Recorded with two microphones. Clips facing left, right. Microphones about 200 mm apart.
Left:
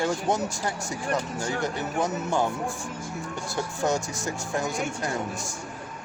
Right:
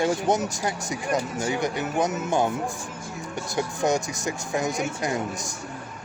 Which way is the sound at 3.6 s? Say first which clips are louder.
Right 3 dB; 15° right (ahead or behind).